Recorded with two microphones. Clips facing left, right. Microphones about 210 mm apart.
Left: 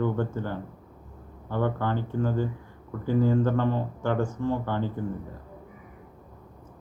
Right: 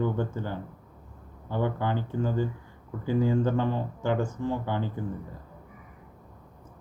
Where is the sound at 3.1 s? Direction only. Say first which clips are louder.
Left 2 dB; 15° right (ahead or behind).